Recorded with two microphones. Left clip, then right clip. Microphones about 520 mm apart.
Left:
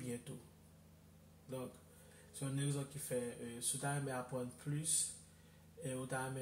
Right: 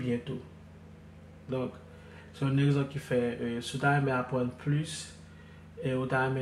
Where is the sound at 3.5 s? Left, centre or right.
Left.